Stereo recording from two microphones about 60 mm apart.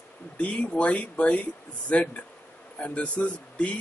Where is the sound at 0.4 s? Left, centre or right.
Left.